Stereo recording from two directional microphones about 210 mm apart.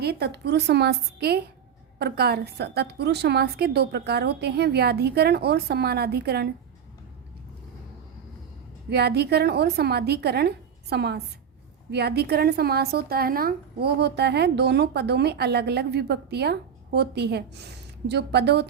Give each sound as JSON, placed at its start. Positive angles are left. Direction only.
{"t": 0.0, "sound": "speech", "side_deg": -50}
{"t": 8.9, "sound": "speech", "side_deg": -50}